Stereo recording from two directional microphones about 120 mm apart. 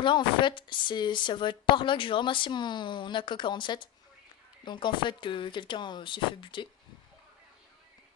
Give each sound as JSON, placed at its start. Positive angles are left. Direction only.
{"t": 0.0, "sound": "a woman's voice", "side_deg": 40}